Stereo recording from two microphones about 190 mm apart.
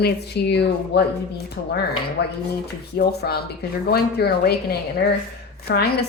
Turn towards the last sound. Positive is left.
turn(degrees=55)  # may be behind; listen again after turning